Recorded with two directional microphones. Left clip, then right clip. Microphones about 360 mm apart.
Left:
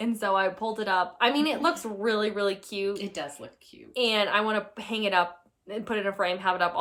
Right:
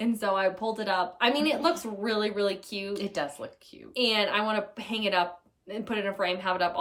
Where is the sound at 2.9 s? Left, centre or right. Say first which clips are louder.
Right 1 dB; centre.